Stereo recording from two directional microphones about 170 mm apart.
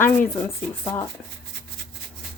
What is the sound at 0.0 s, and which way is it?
Speech, 15° left (ahead or behind).